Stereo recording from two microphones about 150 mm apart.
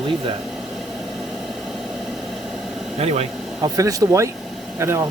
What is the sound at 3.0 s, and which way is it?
Speech, 45° right (ahead or behind).